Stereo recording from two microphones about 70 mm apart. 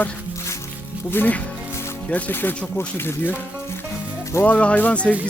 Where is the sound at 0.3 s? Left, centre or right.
Left.